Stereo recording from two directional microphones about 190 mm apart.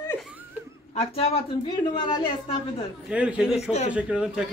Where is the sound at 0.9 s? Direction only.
30° left (ahead or behind).